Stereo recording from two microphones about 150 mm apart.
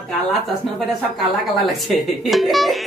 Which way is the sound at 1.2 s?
Centre (ahead or behind).